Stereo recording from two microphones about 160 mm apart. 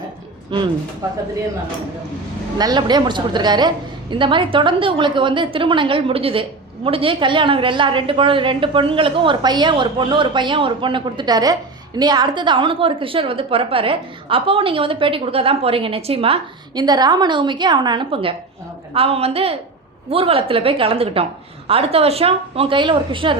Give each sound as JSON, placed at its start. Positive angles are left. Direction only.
{"t": 0.5, "sound": "a woman's voice", "side_deg": -30}
{"t": 2.6, "sound": "a woman's voice", "side_deg": -25}